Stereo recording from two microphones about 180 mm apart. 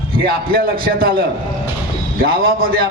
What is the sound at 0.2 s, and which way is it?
A man's voice, 55° right (ahead or behind).